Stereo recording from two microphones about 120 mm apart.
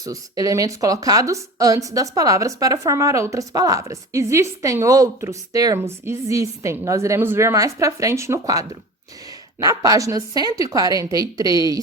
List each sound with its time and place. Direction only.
0.0 s speech: 30° right (ahead or behind)